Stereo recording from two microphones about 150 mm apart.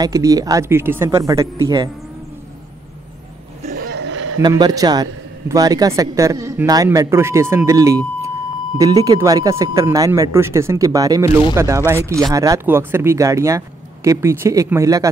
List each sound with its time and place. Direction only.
0.0 s a man's voice: 25° right (ahead or behind)
4.4 s a man's voice: 25° right (ahead or behind)